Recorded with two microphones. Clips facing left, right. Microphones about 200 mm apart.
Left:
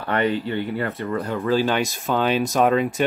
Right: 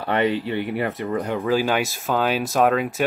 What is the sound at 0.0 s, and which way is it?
Speech, 20° right (ahead or behind).